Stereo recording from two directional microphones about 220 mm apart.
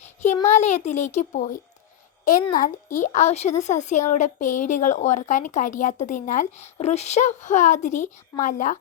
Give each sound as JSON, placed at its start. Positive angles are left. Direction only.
{"t": 0.4, "sound": "speech", "side_deg": 30}